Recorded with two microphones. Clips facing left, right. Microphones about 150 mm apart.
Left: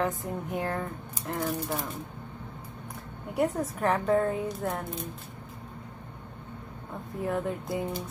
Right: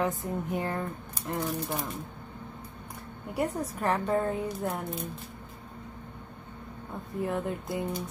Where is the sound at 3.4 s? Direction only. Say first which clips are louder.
Left 3 dB; centre (ahead or behind).